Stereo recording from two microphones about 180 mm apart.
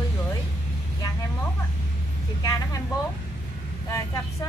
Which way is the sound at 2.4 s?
20° left (ahead or behind).